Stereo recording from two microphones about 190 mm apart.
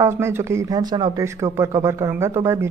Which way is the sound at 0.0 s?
15° right (ahead or behind).